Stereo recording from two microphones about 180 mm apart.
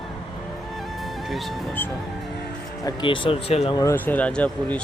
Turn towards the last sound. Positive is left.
turn(degrees=5)  # may be behind; listen again after turning